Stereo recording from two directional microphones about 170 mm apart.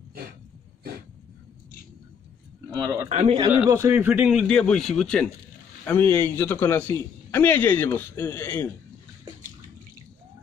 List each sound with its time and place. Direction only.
2.7 s speech: 20° right (ahead or behind)
3.1 s a man's voice: 45° right (ahead or behind)
3.5 s a man's voice: 15° right (ahead or behind); by 8.6 s 10° left (ahead or behind)